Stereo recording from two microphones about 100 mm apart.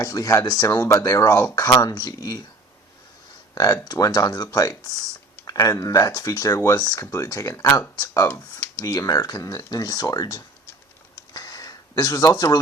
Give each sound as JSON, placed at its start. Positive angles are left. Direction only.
{"t": 0.0, "sound": "speech", "side_deg": 35}
{"t": 3.5, "sound": "speech", "side_deg": 40}
{"t": 11.3, "sound": "a sound", "side_deg": 40}